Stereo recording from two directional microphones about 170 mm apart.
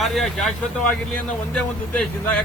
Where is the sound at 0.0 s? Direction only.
Centre (ahead or behind).